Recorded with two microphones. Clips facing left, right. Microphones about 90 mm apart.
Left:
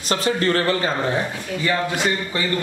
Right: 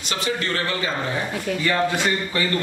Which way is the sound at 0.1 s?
40° left (ahead or behind).